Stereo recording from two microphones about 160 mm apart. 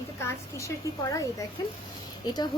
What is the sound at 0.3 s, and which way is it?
A woman's voice, 20° left (ahead or behind).